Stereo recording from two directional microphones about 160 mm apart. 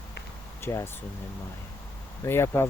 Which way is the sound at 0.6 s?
20° left (ahead or behind).